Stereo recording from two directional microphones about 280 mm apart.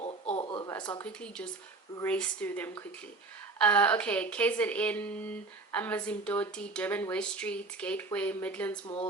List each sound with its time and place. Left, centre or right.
0.3 s a sound: centre
0.7 s speech: centre
1.0 s speech: centre